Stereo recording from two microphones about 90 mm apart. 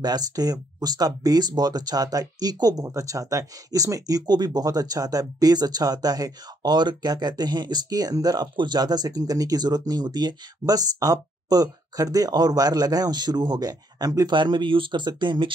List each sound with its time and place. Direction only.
0.0 s speech: 45° right (ahead or behind)
10.6 s speech: 40° right (ahead or behind)
14.3 s speech: 60° right (ahead or behind)